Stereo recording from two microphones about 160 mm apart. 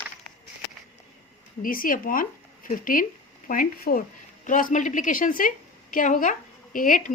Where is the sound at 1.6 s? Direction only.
60° left (ahead or behind).